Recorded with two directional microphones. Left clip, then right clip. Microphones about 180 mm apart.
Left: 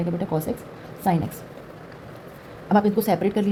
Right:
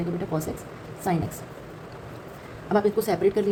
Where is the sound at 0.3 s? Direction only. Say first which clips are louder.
Left 3 dB; 20° left (ahead or behind).